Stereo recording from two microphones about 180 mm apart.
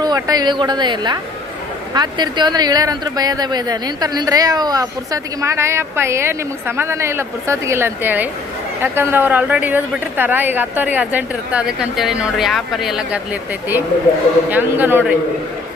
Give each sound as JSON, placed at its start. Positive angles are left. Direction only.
{"t": 0.0, "sound": "speech", "side_deg": -20}
{"t": 14.5, "sound": "speech", "side_deg": -10}